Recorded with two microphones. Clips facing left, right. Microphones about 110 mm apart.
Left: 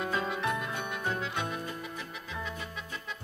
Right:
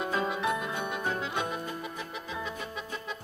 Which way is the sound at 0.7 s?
15° right (ahead or behind).